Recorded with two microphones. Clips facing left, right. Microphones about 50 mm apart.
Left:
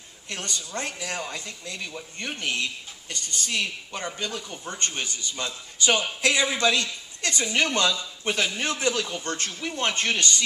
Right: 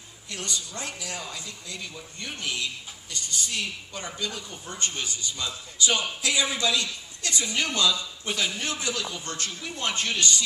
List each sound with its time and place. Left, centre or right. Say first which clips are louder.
0.3 s speech: left 2 dB; left